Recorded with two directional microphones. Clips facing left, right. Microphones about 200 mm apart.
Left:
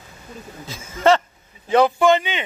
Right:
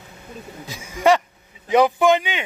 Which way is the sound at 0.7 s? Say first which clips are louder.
Even; 15° right (ahead or behind).